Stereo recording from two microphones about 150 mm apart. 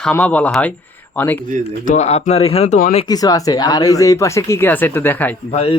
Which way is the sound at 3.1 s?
25° left (ahead or behind).